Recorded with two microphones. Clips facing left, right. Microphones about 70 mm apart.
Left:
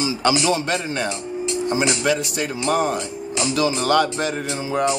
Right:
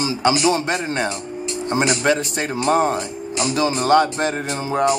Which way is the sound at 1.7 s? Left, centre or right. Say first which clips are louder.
Right 3 dB; right.